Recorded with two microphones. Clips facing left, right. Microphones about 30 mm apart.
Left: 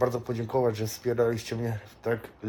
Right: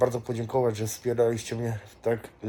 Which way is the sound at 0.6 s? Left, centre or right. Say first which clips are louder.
Even; left.